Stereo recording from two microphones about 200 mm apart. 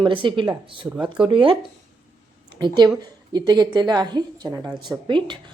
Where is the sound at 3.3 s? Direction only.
20° right (ahead or behind).